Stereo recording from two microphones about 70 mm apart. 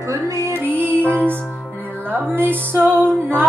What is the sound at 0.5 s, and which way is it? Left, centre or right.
Music, right.